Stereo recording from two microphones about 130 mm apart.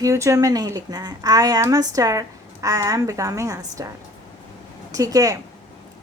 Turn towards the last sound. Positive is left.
turn(degrees=-25)  # may be behind; listen again after turning